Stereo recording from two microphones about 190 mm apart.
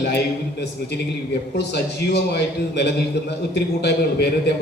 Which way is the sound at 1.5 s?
60° left (ahead or behind).